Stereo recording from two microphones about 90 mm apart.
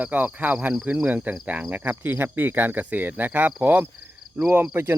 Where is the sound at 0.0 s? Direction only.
20° right (ahead or behind).